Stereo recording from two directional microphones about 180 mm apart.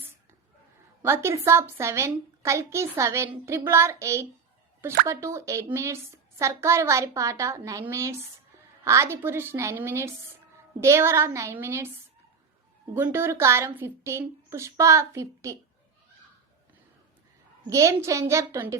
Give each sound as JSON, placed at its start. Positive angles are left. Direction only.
{"t": 1.0, "sound": "a woman's voice", "side_deg": -15}
{"t": 12.9, "sound": "a woman's voice", "side_deg": -15}
{"t": 17.7, "sound": "a woman's voice", "side_deg": -15}